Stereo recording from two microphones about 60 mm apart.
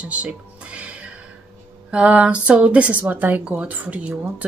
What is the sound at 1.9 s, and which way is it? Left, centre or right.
A woman's voice, right.